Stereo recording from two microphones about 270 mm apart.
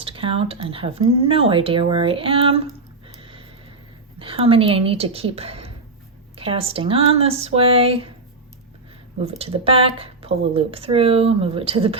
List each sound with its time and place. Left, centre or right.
0.0 s speech: centre
3.2 s a sound: centre
4.2 s speech: centre
9.2 s speech: right